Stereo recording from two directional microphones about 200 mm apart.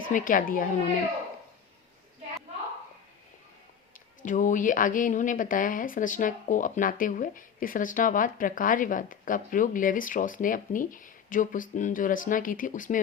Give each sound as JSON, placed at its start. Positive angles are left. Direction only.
{"t": 0.1, "sound": "speech", "side_deg": 40}
{"t": 4.2, "sound": "speech", "side_deg": 40}